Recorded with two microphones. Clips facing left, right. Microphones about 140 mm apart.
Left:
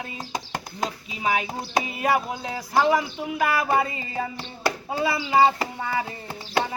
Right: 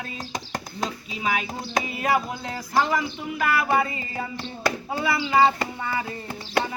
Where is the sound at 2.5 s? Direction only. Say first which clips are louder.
Left 3 dB; 15° left (ahead or behind).